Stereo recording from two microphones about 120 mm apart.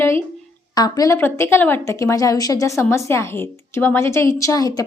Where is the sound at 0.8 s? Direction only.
30° left (ahead or behind).